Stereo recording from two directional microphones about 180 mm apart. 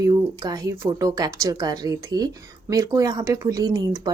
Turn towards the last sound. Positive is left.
turn(degrees=-20)  # may be behind; listen again after turning